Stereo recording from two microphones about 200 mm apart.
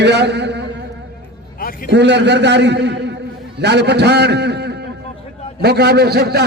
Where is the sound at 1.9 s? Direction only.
60° right (ahead or behind).